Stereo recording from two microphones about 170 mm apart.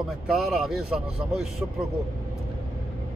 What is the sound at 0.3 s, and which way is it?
Speech, centre (ahead or behind).